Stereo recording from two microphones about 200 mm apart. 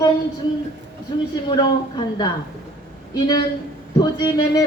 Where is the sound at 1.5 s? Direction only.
20° left (ahead or behind).